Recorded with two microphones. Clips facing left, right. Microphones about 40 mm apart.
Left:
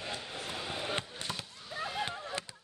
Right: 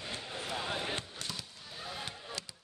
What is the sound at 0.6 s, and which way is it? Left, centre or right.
Basketball bounce, centre.